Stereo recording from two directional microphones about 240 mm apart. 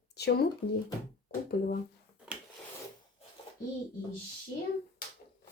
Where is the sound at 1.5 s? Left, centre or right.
Left.